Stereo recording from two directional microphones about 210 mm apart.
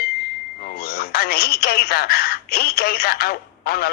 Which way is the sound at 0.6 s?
45° left (ahead or behind).